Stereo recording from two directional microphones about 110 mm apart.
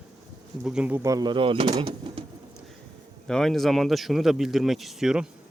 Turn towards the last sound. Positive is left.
turn(degrees=-5)  # may be behind; listen again after turning